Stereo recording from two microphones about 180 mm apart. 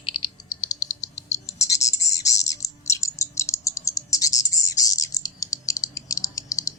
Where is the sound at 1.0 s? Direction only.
20° left (ahead or behind).